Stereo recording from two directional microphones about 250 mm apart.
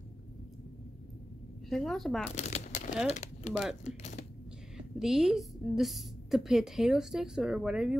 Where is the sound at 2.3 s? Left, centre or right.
Left.